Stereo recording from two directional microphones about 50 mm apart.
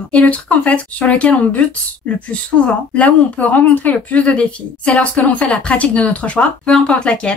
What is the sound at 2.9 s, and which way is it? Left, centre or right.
Speech, left.